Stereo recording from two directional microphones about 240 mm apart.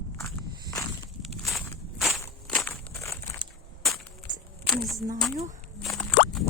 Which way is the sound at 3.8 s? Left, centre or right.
Centre.